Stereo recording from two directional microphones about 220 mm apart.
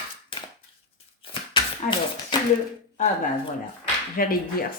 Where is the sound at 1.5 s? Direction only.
20° left (ahead or behind).